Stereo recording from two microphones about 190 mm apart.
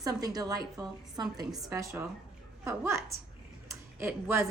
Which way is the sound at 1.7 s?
15° right (ahead or behind).